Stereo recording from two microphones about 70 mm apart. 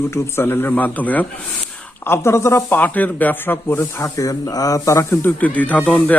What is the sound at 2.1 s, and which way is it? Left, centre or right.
Speech, left.